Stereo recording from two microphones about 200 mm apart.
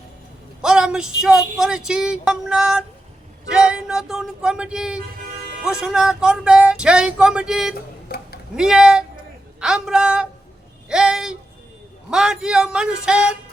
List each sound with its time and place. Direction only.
0.6 s speech: 5° right (ahead or behind)
8.0 s a sound: 50° left (ahead or behind)
8.5 s speech: 5° right (ahead or behind)